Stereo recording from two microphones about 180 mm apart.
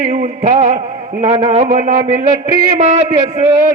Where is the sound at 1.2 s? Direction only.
35° right (ahead or behind).